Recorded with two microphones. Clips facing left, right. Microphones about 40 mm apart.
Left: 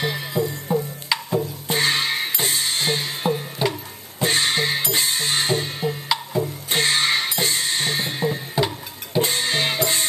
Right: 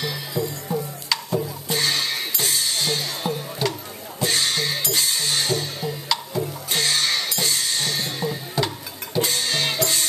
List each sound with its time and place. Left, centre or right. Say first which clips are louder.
0.0 s music: left 3 dB; left